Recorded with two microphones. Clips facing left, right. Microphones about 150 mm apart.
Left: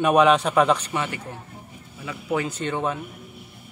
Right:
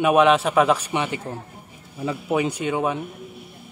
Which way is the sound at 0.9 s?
15° right (ahead or behind).